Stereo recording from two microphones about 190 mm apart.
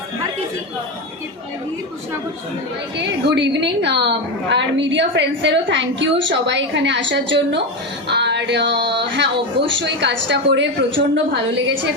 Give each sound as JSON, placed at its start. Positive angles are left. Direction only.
{"t": 3.0, "sound": "a woman's voice", "side_deg": -65}